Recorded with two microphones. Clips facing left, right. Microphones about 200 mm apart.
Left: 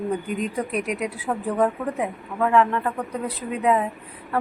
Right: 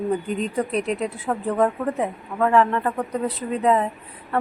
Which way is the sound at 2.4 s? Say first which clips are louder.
Right 1 dB; centre (ahead or behind).